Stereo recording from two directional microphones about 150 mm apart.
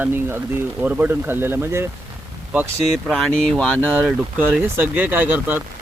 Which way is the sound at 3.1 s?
5° left (ahead or behind).